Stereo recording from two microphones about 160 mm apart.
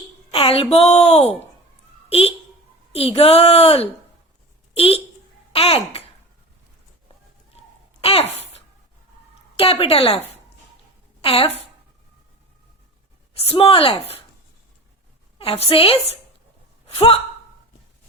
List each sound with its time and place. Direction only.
0.3 s a woman's voice: 35° left (ahead or behind)
8.0 s a sound: 35° left (ahead or behind)
9.6 s a woman's voice: 35° left (ahead or behind)
13.3 s a woman's voice: 40° left (ahead or behind)
15.4 s a woman's voice: 40° left (ahead or behind)